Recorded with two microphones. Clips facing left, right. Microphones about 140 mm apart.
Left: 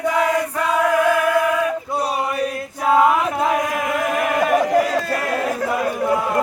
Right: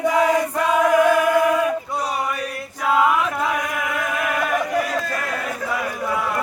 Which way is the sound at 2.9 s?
30° left (ahead or behind).